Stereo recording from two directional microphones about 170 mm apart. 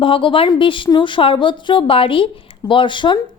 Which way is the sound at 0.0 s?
30° left (ahead or behind).